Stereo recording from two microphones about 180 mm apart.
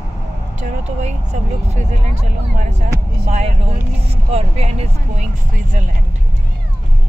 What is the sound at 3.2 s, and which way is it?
Speech, 40° right (ahead or behind).